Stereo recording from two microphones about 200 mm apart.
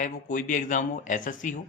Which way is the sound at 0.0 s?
40° left (ahead or behind).